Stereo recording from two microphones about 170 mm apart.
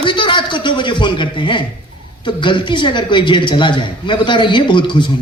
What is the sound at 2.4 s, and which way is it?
A man's voice, 30° left (ahead or behind).